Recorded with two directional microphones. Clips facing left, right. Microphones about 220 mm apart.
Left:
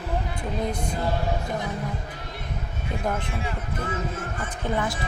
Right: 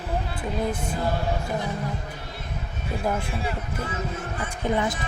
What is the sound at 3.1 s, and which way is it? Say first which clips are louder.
Speech: right 2 dB; 10° right (ahead or behind).